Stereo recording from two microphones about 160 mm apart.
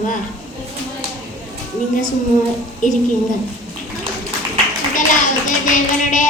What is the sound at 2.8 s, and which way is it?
Speech, 55° left (ahead or behind).